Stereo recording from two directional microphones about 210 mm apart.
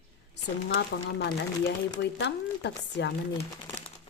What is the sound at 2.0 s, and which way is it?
Speech, 55° left (ahead or behind).